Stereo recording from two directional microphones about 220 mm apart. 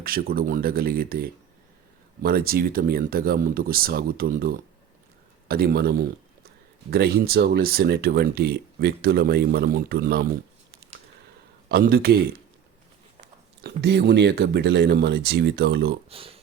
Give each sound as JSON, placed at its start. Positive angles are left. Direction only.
{"t": 0.0, "sound": "speech", "side_deg": -40}
{"t": 11.7, "sound": "speech", "side_deg": -45}
{"t": 13.6, "sound": "speech", "side_deg": -50}
{"t": 16.0, "sound": "a sound", "side_deg": -25}